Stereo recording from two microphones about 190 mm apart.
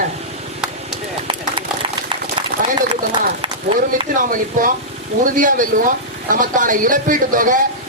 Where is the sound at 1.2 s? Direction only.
25° right (ahead or behind).